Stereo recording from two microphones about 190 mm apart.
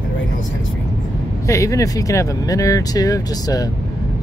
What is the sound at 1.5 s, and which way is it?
Speech, 15° left (ahead or behind).